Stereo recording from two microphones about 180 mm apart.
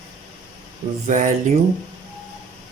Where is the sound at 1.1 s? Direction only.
45° right (ahead or behind).